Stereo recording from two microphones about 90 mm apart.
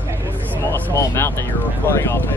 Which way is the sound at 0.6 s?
25° left (ahead or behind).